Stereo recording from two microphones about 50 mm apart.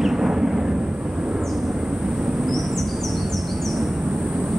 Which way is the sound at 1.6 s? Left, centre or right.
Centre.